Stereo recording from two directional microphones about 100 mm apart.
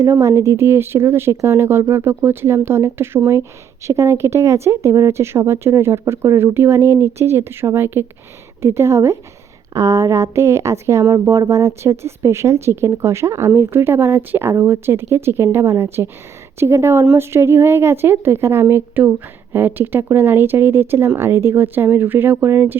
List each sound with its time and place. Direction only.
0.0 s speech: 30° right (ahead or behind)